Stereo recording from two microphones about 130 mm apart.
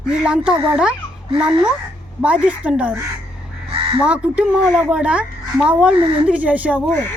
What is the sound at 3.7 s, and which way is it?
Crow, 40° right (ahead or behind).